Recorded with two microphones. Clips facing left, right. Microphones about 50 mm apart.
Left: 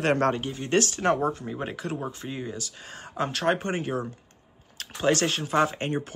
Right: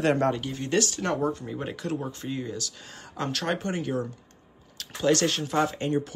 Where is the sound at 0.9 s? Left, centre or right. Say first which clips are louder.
Left 3 dB; left.